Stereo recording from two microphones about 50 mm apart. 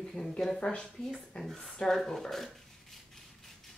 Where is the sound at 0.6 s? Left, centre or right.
Left.